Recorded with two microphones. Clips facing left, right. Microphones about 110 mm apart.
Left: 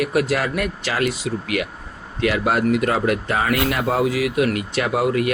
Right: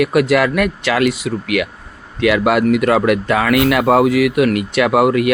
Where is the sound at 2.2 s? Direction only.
90° right.